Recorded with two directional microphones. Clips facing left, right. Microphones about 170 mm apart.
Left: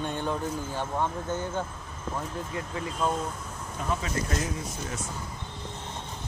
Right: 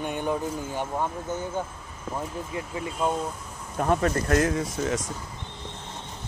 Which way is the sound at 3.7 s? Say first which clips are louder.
Right 7 dB; 55° right (ahead or behind).